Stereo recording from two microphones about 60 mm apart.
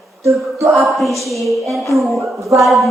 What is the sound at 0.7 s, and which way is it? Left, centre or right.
Speech, centre.